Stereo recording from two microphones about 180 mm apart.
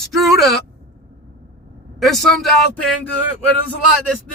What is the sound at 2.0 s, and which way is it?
Speech, centre (ahead or behind).